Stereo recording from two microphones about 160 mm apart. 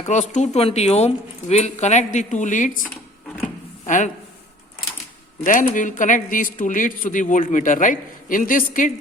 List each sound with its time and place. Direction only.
0.0 s speech: 50° left (ahead or behind)
5.5 s speech: 55° left (ahead or behind)